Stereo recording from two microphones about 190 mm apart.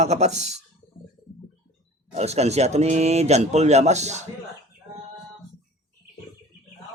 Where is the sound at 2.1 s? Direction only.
35° right (ahead or behind).